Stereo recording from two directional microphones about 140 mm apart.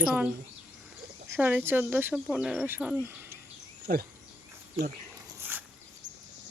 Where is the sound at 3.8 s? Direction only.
90° right.